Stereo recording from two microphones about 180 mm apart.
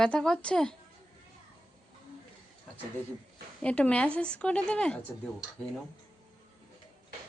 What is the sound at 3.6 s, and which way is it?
Speech, 5° left (ahead or behind).